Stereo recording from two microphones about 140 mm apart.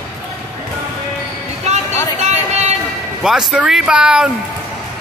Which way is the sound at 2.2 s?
55° right (ahead or behind).